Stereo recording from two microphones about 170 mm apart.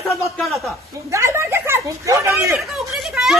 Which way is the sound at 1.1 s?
15° right (ahead or behind).